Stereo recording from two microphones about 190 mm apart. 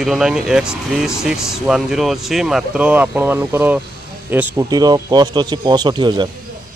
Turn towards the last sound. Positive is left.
turn(degrees=-20)  # may be behind; listen again after turning